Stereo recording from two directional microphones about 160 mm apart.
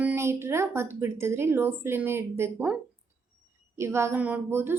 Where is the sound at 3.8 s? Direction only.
15° right (ahead or behind).